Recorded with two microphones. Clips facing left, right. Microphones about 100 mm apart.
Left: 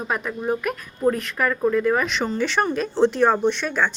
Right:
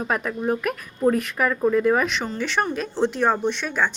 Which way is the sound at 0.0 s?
Centre (ahead or behind).